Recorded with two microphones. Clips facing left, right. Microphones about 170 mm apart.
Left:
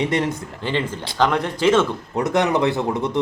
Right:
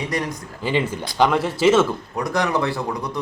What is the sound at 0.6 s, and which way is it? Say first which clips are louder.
Speech: right 2 dB; 10° right (ahead or behind).